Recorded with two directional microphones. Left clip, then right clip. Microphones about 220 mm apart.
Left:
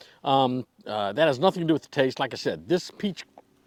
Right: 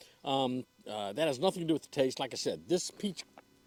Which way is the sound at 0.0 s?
40° left (ahead or behind).